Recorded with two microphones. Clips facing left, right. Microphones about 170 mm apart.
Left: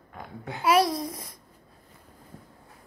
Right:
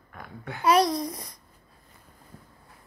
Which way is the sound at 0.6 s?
5° left (ahead or behind).